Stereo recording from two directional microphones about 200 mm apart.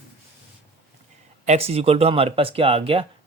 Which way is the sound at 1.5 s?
30° right (ahead or behind).